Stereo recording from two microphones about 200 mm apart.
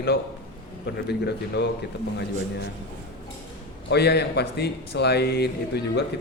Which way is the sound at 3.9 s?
55° left (ahead or behind).